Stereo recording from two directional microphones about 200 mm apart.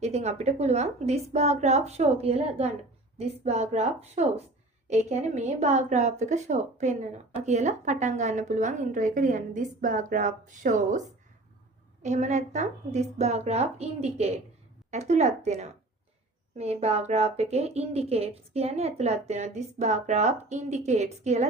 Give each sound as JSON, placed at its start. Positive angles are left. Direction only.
{"t": 0.0, "sound": "a woman's voice", "side_deg": -30}
{"t": 12.0, "sound": "a woman's voice", "side_deg": -35}